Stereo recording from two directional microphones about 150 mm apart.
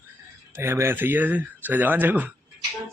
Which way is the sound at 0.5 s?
15° right (ahead or behind).